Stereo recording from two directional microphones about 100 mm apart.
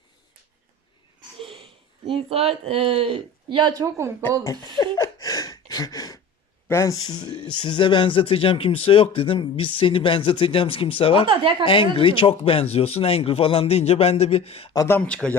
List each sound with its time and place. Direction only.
1.4 s speech: 65° right (ahead or behind)
3.8 s speech: 30° right (ahead or behind)
4.8 s a sound: 40° left (ahead or behind)
6.7 s speech: 25° left (ahead or behind)
6.9 s speech: 40° left (ahead or behind); by 14.7 s 75° left (ahead or behind)
14.8 s speech: 15° left (ahead or behind)